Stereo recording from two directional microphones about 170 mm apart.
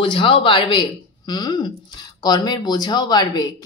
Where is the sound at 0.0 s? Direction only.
30° left (ahead or behind).